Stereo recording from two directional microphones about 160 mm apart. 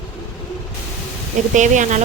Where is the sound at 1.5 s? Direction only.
50° right (ahead or behind).